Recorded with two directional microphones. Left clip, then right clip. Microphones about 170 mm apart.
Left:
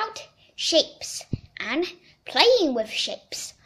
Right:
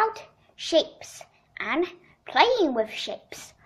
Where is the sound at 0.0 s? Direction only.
45° left (ahead or behind).